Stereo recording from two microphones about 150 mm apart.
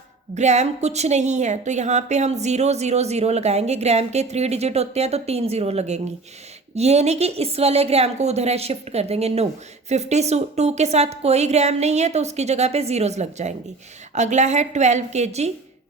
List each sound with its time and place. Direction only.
0.3 s a woman's voice: 50° right (ahead or behind)